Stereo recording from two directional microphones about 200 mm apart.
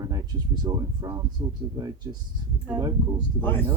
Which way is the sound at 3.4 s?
10° left (ahead or behind).